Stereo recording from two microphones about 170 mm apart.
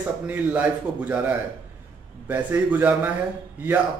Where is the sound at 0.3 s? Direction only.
10° right (ahead or behind).